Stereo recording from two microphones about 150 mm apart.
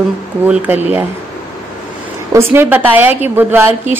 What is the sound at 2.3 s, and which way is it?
A woman's voice, 15° right (ahead or behind).